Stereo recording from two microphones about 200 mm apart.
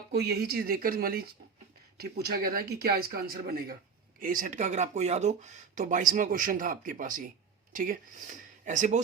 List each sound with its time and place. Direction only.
0.1 s speech: 55° right (ahead or behind); by 9.0 s 40° right (ahead or behind)